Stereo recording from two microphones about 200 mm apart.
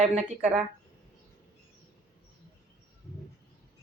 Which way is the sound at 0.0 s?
35° right (ahead or behind).